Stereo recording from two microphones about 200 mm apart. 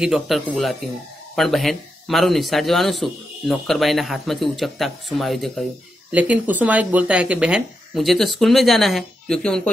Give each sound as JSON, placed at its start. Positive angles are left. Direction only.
{"t": 0.0, "sound": "speech", "side_deg": 0}